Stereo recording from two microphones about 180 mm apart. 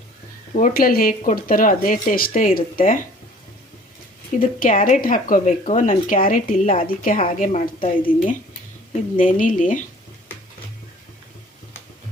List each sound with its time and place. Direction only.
0.5 s speech: 50° left (ahead or behind)
4.4 s speech: 50° left (ahead or behind)